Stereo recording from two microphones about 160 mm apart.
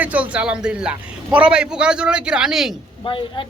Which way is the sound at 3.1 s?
30° left (ahead or behind).